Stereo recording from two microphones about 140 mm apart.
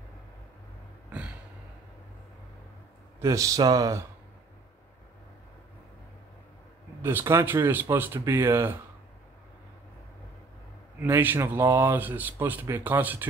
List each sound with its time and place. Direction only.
3.2 s speech: 25° right (ahead or behind)
7.0 s speech: 15° right (ahead or behind)
11.0 s speech: 15° right (ahead or behind)